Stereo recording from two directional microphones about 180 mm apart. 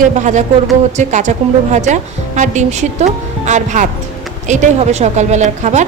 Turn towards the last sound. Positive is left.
turn(degrees=-40)  # may be behind; listen again after turning